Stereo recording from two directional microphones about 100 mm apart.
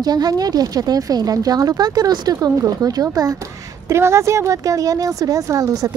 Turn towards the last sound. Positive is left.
turn(degrees=-35)  # may be behind; listen again after turning